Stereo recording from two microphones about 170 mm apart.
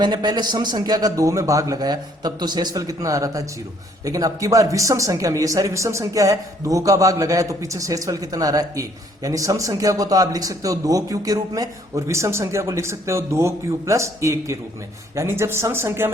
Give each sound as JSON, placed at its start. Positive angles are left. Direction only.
{"t": 0.0, "sound": "speech", "side_deg": -25}